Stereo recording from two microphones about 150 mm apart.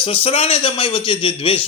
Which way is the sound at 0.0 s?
40° left (ahead or behind).